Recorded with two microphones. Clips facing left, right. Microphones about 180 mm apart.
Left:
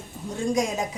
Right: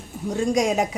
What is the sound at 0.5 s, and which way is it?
Speech, 75° right (ahead or behind).